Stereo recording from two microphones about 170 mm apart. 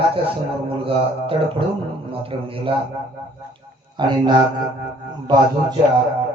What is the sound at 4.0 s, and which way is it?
Speech, 25° right (ahead or behind).